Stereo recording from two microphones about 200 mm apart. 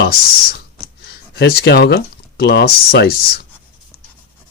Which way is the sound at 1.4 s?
55° left (ahead or behind).